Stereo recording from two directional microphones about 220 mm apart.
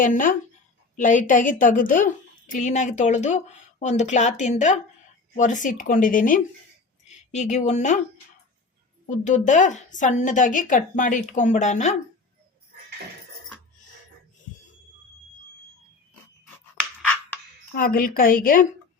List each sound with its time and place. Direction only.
0.0 s a woman's voice: 35° left (ahead or behind)
9.0 s a woman's voice: 35° left (ahead or behind)
17.7 s a woman's voice: 40° left (ahead or behind)